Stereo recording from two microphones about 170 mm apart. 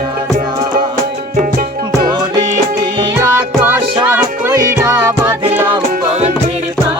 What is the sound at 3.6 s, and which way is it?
Music, 10° right (ahead or behind).